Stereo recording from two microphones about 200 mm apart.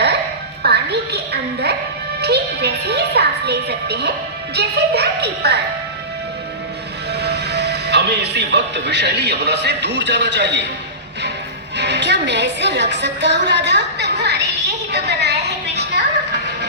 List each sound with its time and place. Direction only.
0.6 s a woman's voice: 55° right (ahead or behind)
7.1 s speech: 55° right (ahead or behind)
11.8 s a woman's voice: 60° right (ahead or behind)
14.9 s a sound: 55° right (ahead or behind)